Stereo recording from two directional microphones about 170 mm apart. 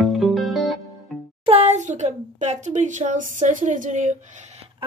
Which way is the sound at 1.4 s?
35° right (ahead or behind).